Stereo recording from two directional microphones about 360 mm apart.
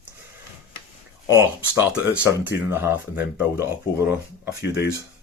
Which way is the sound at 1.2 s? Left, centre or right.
Centre.